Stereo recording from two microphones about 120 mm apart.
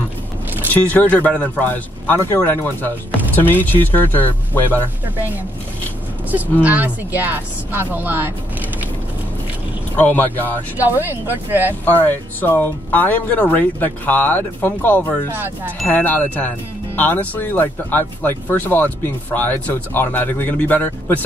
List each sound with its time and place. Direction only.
0.7 s speech: 15° left (ahead or behind)
6.6 s speech: 15° right (ahead or behind)
9.9 s speech: 15° left (ahead or behind)
10.8 s speech: 15° right (ahead or behind)
11.8 s speech: 15° left (ahead or behind)
15.3 s speech: 20° right (ahead or behind)
15.9 s speech: 15° left (ahead or behind)